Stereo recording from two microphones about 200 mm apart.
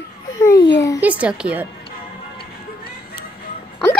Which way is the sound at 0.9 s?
5° right (ahead or behind).